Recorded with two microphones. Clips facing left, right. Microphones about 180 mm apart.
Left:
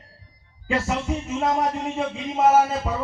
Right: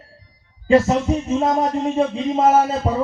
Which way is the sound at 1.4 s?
30° right (ahead or behind).